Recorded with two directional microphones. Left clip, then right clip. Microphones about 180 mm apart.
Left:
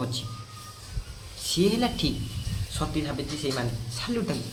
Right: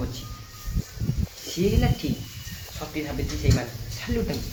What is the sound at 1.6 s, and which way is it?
Speech, 20° left (ahead or behind).